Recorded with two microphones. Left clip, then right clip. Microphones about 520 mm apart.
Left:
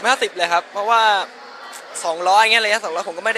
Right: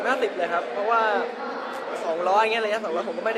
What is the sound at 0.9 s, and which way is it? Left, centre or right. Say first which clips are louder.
Speech: left 7 dB; left.